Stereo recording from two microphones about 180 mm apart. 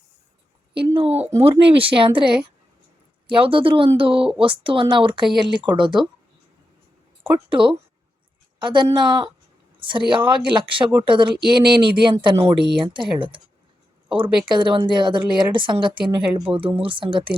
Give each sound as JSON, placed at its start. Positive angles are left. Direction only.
{"t": 0.9, "sound": "a woman's voice", "side_deg": -35}
{"t": 7.5, "sound": "a woman's voice", "side_deg": -30}